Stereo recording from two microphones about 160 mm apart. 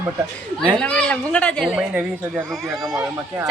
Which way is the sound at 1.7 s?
5° right (ahead or behind).